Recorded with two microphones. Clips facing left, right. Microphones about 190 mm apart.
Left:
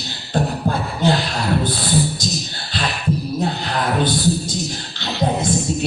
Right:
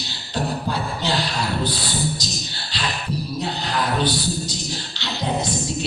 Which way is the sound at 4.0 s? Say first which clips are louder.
Left 4 dB; 50° left (ahead or behind).